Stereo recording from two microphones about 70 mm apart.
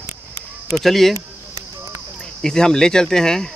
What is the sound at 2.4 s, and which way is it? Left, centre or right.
Speech, centre.